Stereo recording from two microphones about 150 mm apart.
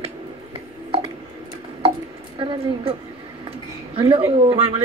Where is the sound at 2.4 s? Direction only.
35° right (ahead or behind).